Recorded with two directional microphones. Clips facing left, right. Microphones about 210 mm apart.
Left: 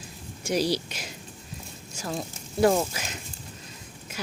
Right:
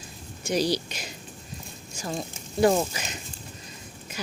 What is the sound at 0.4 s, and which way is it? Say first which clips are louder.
Speech: even; 5° left (ahead or behind).